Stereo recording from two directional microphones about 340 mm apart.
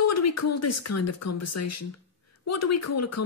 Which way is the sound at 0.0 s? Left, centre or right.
Left.